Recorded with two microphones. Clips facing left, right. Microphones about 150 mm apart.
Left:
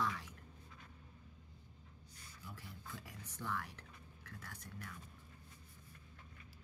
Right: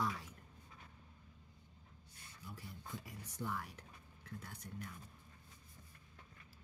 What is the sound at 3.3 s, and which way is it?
Speech, 15° right (ahead or behind).